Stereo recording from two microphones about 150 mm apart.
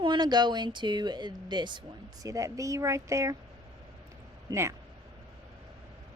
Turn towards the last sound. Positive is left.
turn(degrees=-20)  # may be behind; listen again after turning